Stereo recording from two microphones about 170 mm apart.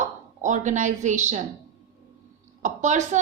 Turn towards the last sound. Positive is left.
turn(degrees=-45)  # may be behind; listen again after turning